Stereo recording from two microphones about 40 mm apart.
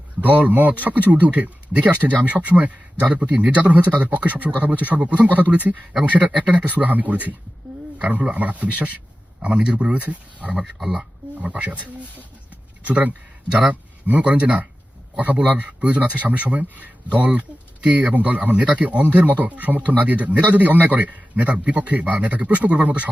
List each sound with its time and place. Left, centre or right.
0.2 s speech: right
10.6 s speech: centre
11.3 s speech: right